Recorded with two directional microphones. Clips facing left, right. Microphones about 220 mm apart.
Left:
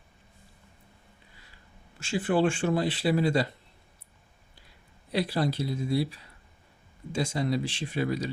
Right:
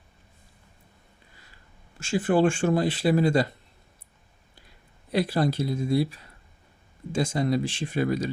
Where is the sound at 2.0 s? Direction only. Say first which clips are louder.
Right 3 dB; 45° right (ahead or behind).